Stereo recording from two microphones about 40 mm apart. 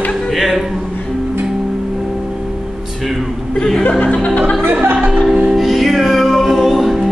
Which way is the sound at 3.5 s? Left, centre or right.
Centre.